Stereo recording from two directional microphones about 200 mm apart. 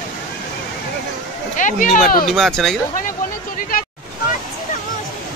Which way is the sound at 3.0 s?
45° left (ahead or behind).